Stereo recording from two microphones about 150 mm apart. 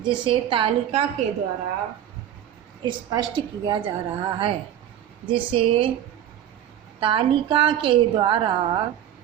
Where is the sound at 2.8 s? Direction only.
30° right (ahead or behind).